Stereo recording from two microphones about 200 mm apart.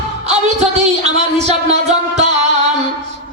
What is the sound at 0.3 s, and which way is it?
A woman's voice, 35° right (ahead or behind).